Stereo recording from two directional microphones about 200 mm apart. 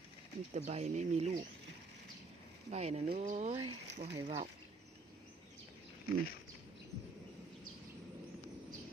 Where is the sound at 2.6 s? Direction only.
35° right (ahead or behind).